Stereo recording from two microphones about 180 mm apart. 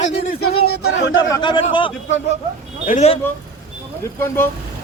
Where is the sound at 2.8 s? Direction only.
40° left (ahead or behind).